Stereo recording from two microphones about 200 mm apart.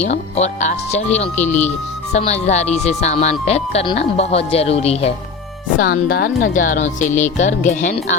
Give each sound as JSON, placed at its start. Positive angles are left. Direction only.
{"t": 0.0, "sound": "speech", "side_deg": 35}
{"t": 5.8, "sound": "speech", "side_deg": 50}